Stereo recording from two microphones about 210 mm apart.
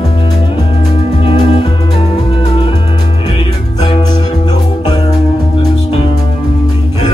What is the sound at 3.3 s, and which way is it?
Music, 25° left (ahead or behind).